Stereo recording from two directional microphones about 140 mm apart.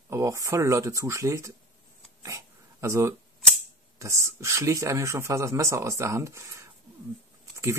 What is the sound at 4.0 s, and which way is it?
Speech, 20° right (ahead or behind).